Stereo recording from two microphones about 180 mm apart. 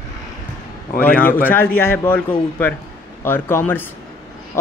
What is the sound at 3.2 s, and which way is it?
Speech, 15° left (ahead or behind).